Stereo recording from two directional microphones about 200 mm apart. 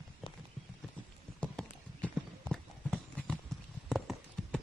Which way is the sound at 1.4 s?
5° left (ahead or behind).